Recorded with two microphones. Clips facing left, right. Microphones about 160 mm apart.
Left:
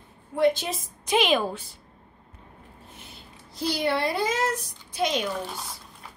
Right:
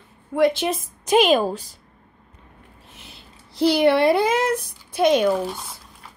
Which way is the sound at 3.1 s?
70° right (ahead or behind).